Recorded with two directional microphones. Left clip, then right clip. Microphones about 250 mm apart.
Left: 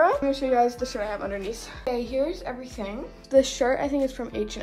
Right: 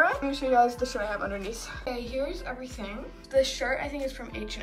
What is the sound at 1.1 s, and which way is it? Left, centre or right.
Speech, centre.